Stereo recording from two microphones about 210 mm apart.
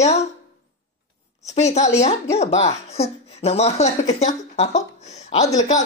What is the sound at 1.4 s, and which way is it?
Speech, 35° left (ahead or behind).